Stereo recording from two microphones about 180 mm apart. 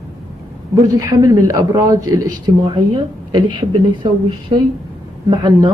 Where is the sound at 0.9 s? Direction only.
20° right (ahead or behind).